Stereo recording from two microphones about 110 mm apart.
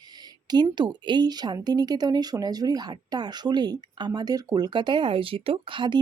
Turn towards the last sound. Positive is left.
turn(degrees=-50)  # may be behind; listen again after turning